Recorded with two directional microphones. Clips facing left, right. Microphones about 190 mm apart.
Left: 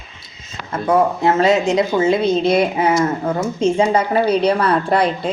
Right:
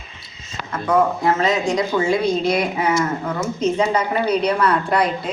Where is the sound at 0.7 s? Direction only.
25° left (ahead or behind).